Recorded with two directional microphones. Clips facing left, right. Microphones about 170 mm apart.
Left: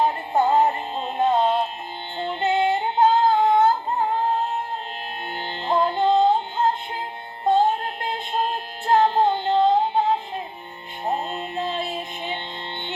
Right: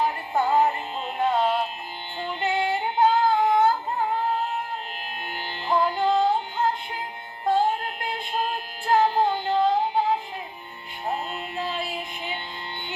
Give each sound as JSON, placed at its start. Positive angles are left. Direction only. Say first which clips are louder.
{"t": 0.0, "sound": "music", "louder": "left 4 dB", "side_deg": 25}